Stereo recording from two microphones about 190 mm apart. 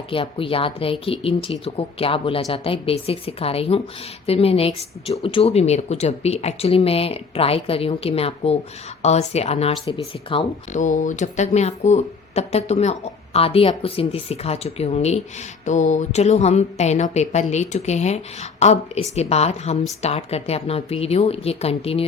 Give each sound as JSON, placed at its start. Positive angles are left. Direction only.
{"t": 0.1, "sound": "speech", "side_deg": 30}
{"t": 10.8, "sound": "speech", "side_deg": 40}